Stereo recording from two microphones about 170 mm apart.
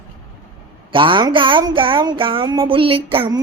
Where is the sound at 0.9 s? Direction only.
30° right (ahead or behind).